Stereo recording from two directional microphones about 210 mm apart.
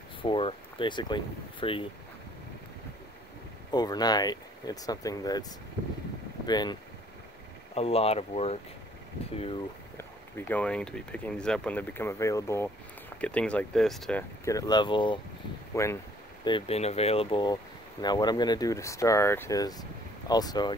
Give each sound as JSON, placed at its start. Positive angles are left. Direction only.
{"t": 0.2, "sound": "speech", "side_deg": 25}
{"t": 3.7, "sound": "speech", "side_deg": 20}
{"t": 9.9, "sound": "speech", "side_deg": 10}
{"t": 14.4, "sound": "speech", "side_deg": 15}
{"t": 16.4, "sound": "speech", "side_deg": 25}